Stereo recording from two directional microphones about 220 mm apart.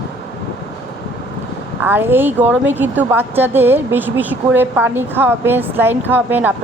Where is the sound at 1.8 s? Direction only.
10° right (ahead or behind).